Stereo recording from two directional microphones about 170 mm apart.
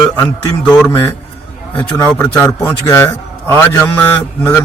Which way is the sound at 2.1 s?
5° left (ahead or behind).